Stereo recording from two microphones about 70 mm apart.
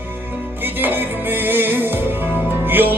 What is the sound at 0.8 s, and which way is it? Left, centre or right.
Music, right.